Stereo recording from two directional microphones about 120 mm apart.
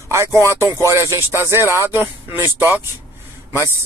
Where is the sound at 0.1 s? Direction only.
25° right (ahead or behind).